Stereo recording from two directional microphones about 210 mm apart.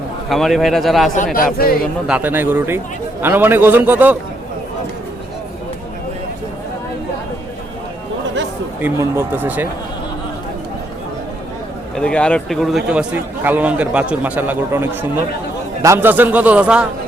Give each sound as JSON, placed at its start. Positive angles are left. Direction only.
{"t": 0.3, "sound": "speech", "side_deg": 0}
{"t": 1.1, "sound": "speech", "side_deg": 40}
{"t": 2.0, "sound": "a man's voice", "side_deg": -5}
{"t": 8.8, "sound": "a man's voice", "side_deg": -10}
{"t": 11.9, "sound": "a man's voice", "side_deg": 5}